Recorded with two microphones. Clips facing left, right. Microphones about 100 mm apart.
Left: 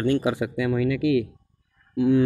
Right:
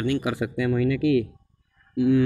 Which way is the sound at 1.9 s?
30° left (ahead or behind).